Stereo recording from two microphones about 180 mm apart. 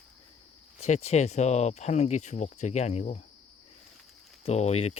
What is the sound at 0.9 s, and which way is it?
Speech, 35° left (ahead or behind).